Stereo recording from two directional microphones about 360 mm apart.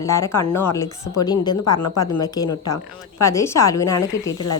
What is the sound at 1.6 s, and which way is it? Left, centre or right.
Speech, left.